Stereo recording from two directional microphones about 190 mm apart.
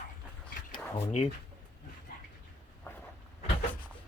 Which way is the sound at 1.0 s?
35° left (ahead or behind).